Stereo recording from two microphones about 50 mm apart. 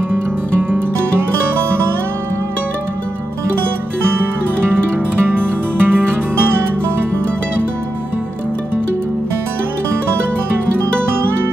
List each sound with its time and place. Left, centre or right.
0.1 s music: right
5.2 s music: right